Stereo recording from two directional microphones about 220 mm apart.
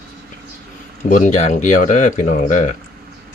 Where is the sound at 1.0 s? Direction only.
35° left (ahead or behind).